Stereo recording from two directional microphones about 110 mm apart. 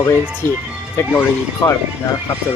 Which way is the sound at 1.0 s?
20° left (ahead or behind).